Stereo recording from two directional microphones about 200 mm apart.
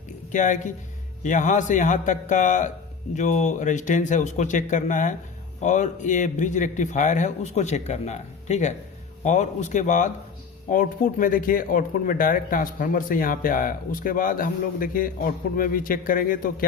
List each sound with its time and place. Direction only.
0.3 s a man's voice: 40° left (ahead or behind)